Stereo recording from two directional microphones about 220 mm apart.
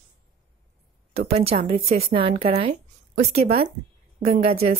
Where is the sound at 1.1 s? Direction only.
25° right (ahead or behind).